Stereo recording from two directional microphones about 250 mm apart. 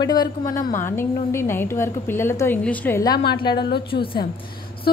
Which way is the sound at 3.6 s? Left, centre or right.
Left.